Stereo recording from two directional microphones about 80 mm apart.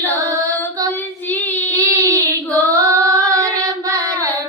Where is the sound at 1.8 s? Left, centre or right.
Right.